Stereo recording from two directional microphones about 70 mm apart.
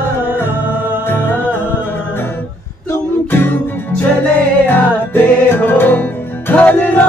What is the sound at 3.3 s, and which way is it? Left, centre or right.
Music, left.